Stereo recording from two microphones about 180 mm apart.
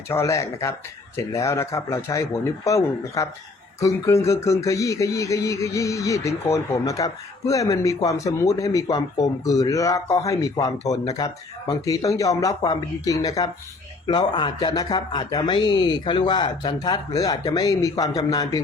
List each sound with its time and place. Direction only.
0.1 s speech: 15° left (ahead or behind)